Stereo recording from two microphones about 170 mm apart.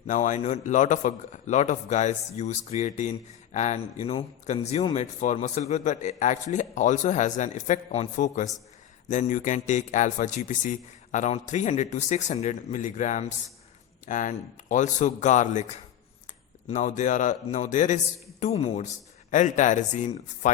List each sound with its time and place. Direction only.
0.1 s a man's voice: 45° left (ahead or behind)